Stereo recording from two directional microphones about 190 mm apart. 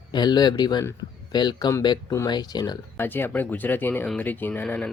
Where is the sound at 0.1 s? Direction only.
20° left (ahead or behind).